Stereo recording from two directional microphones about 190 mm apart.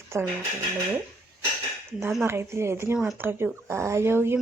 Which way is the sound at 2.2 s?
15° right (ahead or behind).